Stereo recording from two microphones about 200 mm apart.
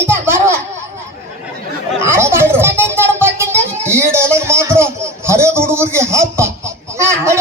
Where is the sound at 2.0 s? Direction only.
10° right (ahead or behind).